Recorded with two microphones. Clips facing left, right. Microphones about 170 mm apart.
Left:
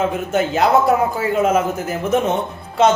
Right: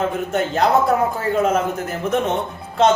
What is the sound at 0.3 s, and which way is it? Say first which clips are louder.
A man's voice: left 2 dB; 5° left (ahead or behind).